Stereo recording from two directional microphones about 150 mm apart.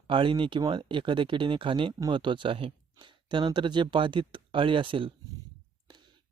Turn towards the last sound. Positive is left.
turn(degrees=-35)  # may be behind; listen again after turning